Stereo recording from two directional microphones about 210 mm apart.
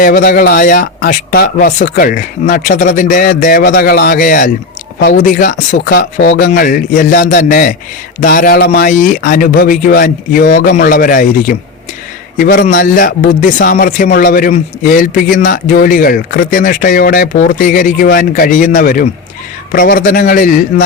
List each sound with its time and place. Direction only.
0.0 s a man's voice: 45° left (ahead or behind)